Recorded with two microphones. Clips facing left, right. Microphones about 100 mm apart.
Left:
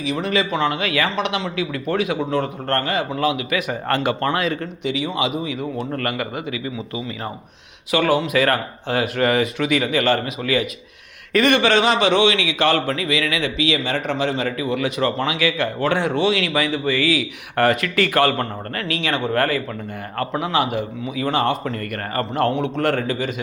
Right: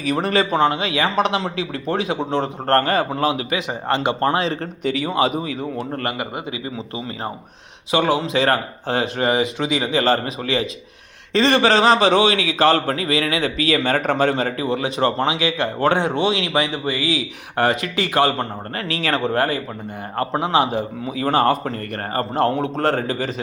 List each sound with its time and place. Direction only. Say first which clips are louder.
0.0 s a man's voice: right 2 dB; 45° right (ahead or behind); by 1.1 s 25° right (ahead or behind)
1.1 s a man's voice: right 3 dB; 35° right (ahead or behind)
3.7 s speech: right 1 dB; 20° right (ahead or behind)
4.8 s speech: right 4 dB; 45° right (ahead or behind)
5.9 s speech: left 1 dB; 25° right (ahead or behind)
7.9 s a man's voice: even; 25° right (ahead or behind)
19.4 s a man's voice: even; 25° right (ahead or behind)